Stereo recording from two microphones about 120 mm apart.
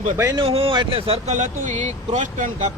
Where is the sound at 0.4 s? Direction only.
50° right (ahead or behind).